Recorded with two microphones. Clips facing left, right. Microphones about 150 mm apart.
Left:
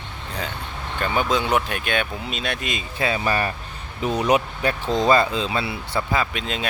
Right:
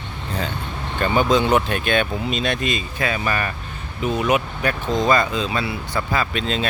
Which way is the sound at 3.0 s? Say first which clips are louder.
Left 3 dB; 25° left (ahead or behind).